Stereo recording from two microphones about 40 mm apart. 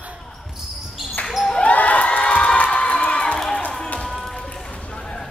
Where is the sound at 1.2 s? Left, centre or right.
Centre.